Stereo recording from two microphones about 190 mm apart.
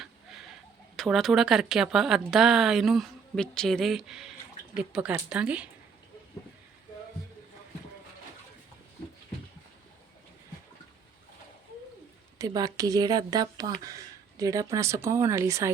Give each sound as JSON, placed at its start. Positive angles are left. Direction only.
{"t": 0.0, "sound": "a sound", "side_deg": 0}
{"t": 0.9, "sound": "speech", "side_deg": 0}
{"t": 12.4, "sound": "speech", "side_deg": -20}